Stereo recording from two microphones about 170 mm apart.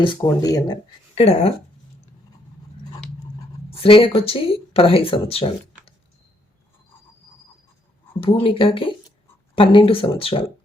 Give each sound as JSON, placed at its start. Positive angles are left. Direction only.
{"t": 0.0, "sound": "speech", "side_deg": 25}
{"t": 1.1, "sound": "speech", "side_deg": 35}
{"t": 3.7, "sound": "speech", "side_deg": 30}
{"t": 8.2, "sound": "speech", "side_deg": 30}